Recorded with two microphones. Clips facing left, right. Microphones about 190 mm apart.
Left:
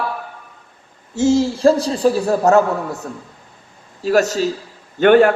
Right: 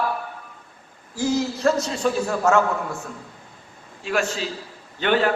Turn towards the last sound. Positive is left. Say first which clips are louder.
# left 10 dB
turn(degrees=50)  # may be behind; listen again after turning